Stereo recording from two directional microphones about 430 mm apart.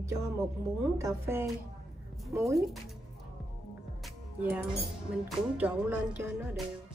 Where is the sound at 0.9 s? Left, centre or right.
Centre.